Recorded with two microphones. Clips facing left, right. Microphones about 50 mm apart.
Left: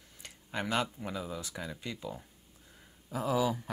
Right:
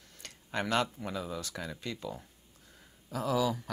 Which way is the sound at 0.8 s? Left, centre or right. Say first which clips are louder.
Right 1 dB; centre.